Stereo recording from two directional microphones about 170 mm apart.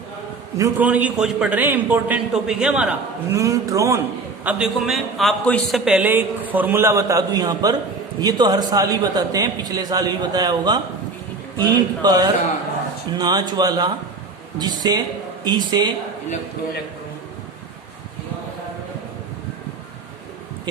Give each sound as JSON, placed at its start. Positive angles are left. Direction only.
{"t": 0.5, "sound": "a man's voice", "side_deg": -15}
{"t": 3.3, "sound": "a man's voice", "side_deg": -20}
{"t": 4.4, "sound": "a man's voice", "side_deg": -5}